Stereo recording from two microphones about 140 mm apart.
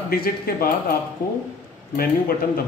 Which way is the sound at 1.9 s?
90° left.